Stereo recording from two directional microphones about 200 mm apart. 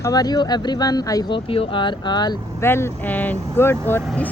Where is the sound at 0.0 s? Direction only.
20° left (ahead or behind).